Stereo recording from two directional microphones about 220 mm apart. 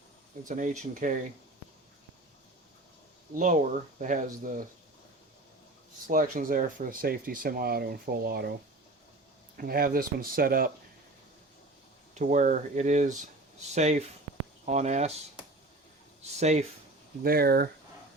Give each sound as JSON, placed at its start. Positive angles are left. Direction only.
{"t": 0.4, "sound": "speech", "side_deg": -35}
{"t": 3.3, "sound": "speech", "side_deg": -35}
{"t": 6.1, "sound": "speech", "side_deg": -40}
{"t": 9.6, "sound": "speech", "side_deg": -45}
{"t": 12.1, "sound": "speech", "side_deg": -35}
{"t": 16.4, "sound": "speech", "side_deg": -30}
{"t": 17.2, "sound": "speech", "side_deg": -45}